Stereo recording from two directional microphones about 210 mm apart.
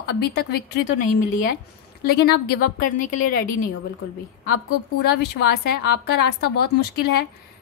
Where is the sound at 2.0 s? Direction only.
50° left (ahead or behind).